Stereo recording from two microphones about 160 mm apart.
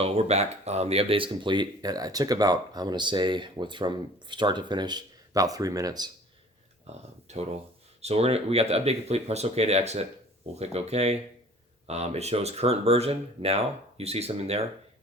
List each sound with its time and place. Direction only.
0.0 s speech: 40° right (ahead or behind); by 6.1 s 25° right (ahead or behind)
6.9 s speech: 45° right (ahead or behind)